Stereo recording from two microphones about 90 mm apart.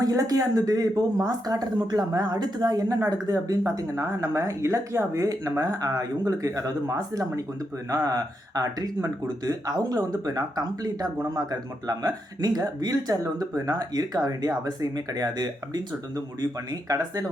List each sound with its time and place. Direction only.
0.0 s speech: 40° right (ahead or behind)